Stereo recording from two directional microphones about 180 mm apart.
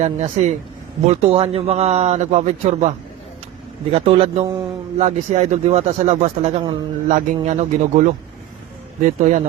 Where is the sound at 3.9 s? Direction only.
30° right (ahead or behind).